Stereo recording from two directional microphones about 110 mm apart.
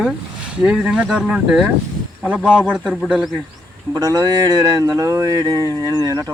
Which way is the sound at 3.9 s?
30° right (ahead or behind).